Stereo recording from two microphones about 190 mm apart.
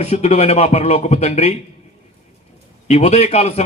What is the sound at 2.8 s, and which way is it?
Speech, 35° left (ahead or behind).